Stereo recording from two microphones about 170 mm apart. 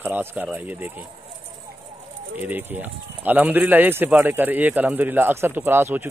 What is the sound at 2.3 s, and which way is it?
Speech, 10° right (ahead or behind).